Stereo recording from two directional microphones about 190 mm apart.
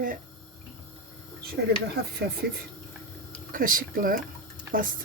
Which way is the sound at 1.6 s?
60° right (ahead or behind).